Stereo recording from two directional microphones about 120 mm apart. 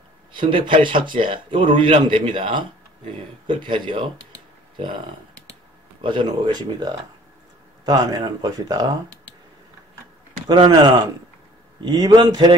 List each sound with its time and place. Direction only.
0.4 s speech: 45° right (ahead or behind)
5.9 s speech: 45° right (ahead or behind)
10.5 s speech: 40° right (ahead or behind)